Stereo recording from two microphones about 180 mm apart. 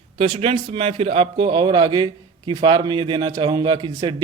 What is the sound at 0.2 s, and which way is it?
A man's voice, 30° right (ahead or behind).